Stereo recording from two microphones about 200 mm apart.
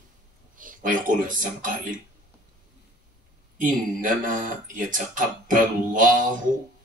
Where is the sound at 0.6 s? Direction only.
40° right (ahead or behind).